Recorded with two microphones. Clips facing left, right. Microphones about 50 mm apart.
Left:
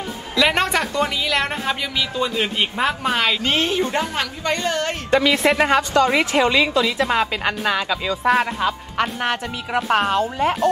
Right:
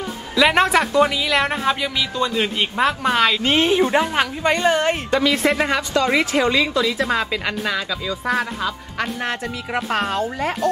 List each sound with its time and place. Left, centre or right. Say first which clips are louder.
0.4 s a woman's voice: right 3 dB; centre
3.4 s a woman's voice: right 3 dB; centre
5.1 s speech: left 4 dB; left